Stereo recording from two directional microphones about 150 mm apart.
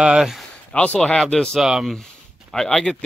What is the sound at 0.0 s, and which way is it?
Speech, 5° right (ahead or behind).